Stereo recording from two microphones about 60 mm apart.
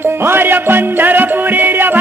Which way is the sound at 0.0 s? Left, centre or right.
Right.